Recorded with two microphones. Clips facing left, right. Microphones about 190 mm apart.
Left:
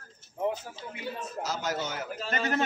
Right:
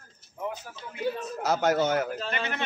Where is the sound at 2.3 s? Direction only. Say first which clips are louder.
Left 3 dB; 40° left (ahead or behind).